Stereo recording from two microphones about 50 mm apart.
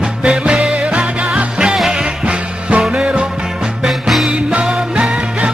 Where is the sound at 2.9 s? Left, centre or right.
Right.